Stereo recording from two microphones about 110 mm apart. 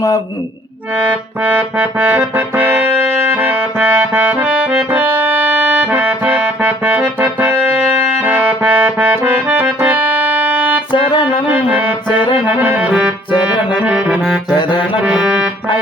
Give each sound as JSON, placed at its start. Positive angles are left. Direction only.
{"t": 1.4, "sound": "music", "side_deg": -15}
{"t": 10.9, "sound": "music", "side_deg": 50}
{"t": 11.4, "sound": "music", "side_deg": -15}
{"t": 12.1, "sound": "music", "side_deg": 45}
{"t": 12.5, "sound": "music", "side_deg": -15}
{"t": 13.7, "sound": "saxophone", "side_deg": -10}
{"t": 14.5, "sound": "music", "side_deg": 45}
{"t": 15.0, "sound": "music", "side_deg": -10}